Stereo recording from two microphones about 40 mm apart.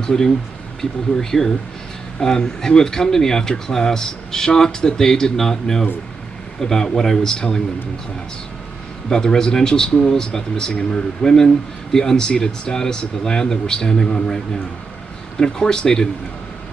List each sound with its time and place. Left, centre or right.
0.0 s speech: centre
9.1 s speech: centre